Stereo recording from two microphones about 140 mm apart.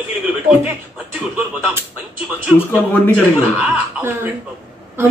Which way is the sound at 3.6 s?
15° right (ahead or behind).